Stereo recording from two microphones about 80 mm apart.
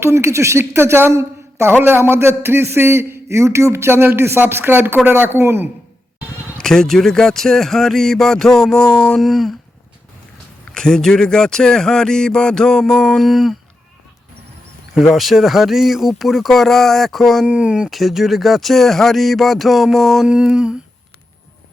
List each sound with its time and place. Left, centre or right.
0.0 s a woman's voice: right
6.6 s speech: centre
9.2 s speech: centre
10.8 s speech: centre
15.1 s speech: centre
17.4 s speech: centre
17.8 s speech: centre